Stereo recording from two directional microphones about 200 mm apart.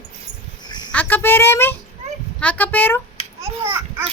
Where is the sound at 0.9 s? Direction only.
10° left (ahead or behind).